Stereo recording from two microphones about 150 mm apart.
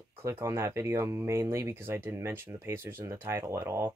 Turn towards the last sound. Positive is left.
turn(degrees=-15)  # may be behind; listen again after turning